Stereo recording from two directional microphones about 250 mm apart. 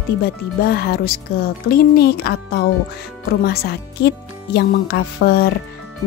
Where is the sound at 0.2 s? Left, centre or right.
Left.